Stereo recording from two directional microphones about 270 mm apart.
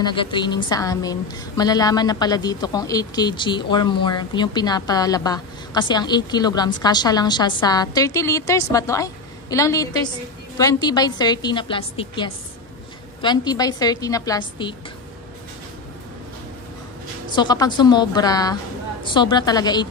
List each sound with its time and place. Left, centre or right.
0.0 s a woman's voice: centre
17.4 s a woman's voice: centre